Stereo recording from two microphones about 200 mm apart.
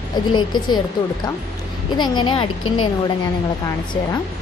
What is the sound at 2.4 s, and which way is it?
Speech, 90° left.